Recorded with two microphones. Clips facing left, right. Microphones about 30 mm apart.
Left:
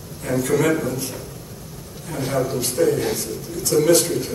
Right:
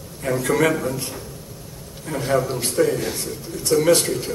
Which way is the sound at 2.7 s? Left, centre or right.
Centre.